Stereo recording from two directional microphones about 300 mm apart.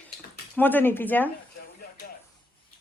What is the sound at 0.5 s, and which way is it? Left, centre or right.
Speech, centre.